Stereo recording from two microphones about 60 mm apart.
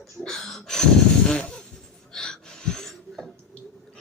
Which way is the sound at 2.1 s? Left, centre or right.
Centre.